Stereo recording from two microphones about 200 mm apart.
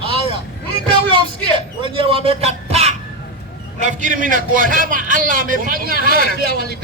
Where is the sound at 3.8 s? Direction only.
40° right (ahead or behind).